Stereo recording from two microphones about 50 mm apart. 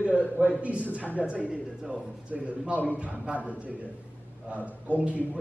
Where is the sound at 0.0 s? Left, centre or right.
Right.